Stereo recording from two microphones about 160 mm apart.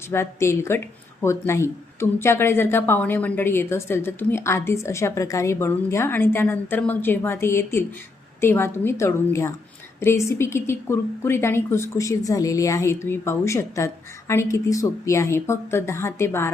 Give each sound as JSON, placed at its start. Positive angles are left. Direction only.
{"t": 0.1, "sound": "a woman's voice", "side_deg": 15}